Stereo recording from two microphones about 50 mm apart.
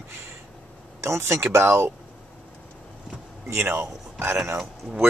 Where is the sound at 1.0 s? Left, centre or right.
Right.